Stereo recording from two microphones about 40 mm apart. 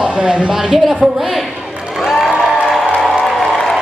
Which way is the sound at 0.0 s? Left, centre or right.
Right.